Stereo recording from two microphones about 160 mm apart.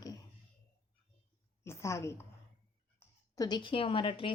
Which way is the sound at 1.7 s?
15° left (ahead or behind).